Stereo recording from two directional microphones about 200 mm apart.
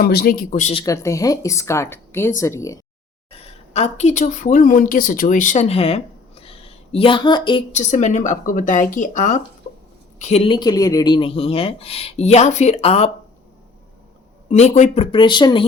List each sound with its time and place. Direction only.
0.0 s speech: 50° left (ahead or behind)
0.7 s a woman's voice: 20° left (ahead or behind)
3.3 s a woman's voice: 30° left (ahead or behind)
7.7 s speech: 35° left (ahead or behind)
14.5 s speech: 35° left (ahead or behind)